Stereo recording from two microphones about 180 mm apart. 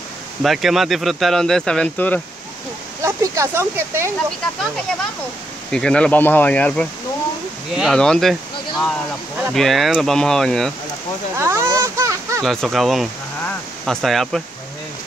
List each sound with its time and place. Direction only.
0.4 s speech: centre (ahead or behind)
3.0 s speech: 15° right (ahead or behind)
5.7 s speech: 5° left (ahead or behind)
9.5 s speech: centre (ahead or behind)
11.3 s a sound: 15° right (ahead or behind)
12.4 s speech: centre (ahead or behind)
13.4 s a sound: 5° left (ahead or behind)